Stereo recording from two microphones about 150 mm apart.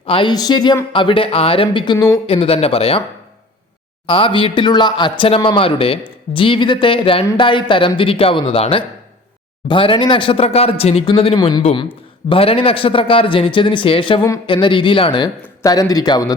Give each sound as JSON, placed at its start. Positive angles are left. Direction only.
{"t": 0.0, "sound": "speech", "side_deg": 35}
{"t": 2.2, "sound": "speech", "side_deg": 40}
{"t": 4.0, "sound": "speech", "side_deg": 35}